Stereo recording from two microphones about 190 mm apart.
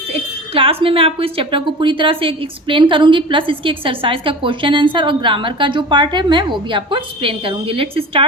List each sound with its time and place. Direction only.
0.1 s a woman's voice: 30° right (ahead or behind)